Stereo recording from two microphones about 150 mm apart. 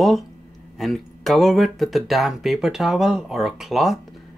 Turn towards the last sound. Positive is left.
turn(degrees=0)  # may be behind; listen again after turning